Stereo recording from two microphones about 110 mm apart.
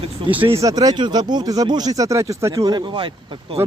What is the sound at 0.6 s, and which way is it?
Speech, 35° right (ahead or behind).